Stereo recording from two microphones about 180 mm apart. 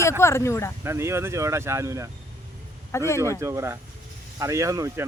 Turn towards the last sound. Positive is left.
turn(degrees=-15)  # may be behind; listen again after turning